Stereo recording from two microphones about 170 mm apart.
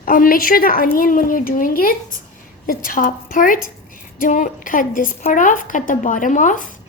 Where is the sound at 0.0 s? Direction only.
55° left (ahead or behind).